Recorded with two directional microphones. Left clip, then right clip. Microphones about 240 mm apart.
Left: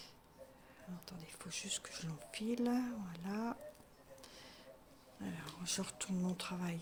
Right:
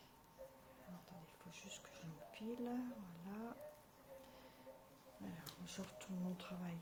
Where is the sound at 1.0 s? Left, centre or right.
Left.